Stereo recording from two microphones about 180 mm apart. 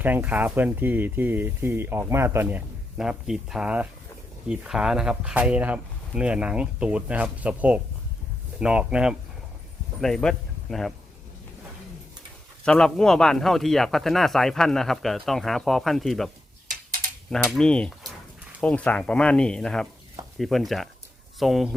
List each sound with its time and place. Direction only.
0.0 s speech: 10° right (ahead or behind)
12.6 s speech: 5° left (ahead or behind)
16.6 s a sound: 50° right (ahead or behind)
17.3 s speech: centre (ahead or behind)